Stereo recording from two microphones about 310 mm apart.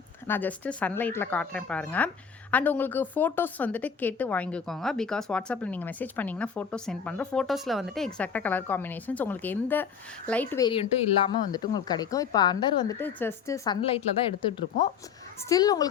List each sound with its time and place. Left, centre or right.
0.3 s a woman's voice: centre